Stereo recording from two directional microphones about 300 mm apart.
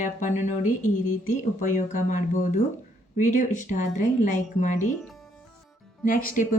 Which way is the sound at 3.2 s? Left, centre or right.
Left.